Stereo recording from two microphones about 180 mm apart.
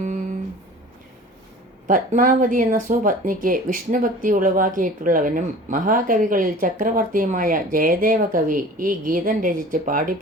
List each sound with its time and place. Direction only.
1.9 s speech: 50° right (ahead or behind)